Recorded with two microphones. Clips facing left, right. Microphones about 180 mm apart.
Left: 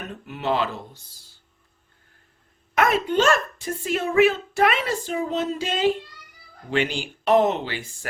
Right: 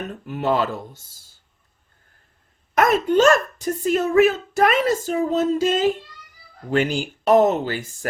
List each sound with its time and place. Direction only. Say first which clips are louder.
0.1 s speech: right 3 dB; 45° right (ahead or behind)
2.7 s speech: right 4 dB; 45° right (ahead or behind)